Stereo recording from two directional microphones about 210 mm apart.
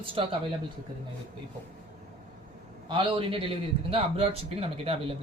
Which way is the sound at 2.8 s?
25° right (ahead or behind).